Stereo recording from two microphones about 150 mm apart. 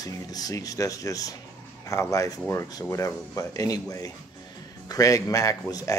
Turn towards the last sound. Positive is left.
turn(degrees=25)  # may be behind; listen again after turning